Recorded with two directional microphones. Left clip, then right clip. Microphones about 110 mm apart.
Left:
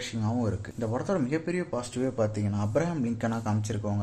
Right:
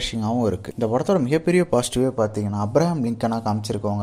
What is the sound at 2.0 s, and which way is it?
Speech, 30° right (ahead or behind).